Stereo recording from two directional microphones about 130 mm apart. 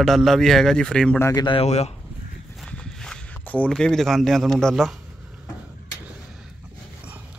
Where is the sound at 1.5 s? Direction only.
55° left (ahead or behind).